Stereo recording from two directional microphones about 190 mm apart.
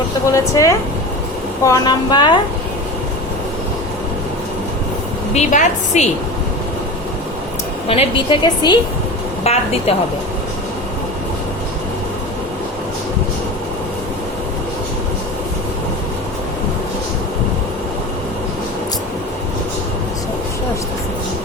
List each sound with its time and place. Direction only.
0.3 s a woman's voice: 15° left (ahead or behind)
5.3 s a woman's voice: 40° left (ahead or behind)
7.9 s a woman's voice: 30° left (ahead or behind)
9.4 s a woman's voice: 35° left (ahead or behind)